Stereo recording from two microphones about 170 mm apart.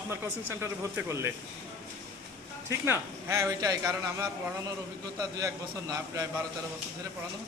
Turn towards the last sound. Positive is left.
turn(degrees=-20)  # may be behind; listen again after turning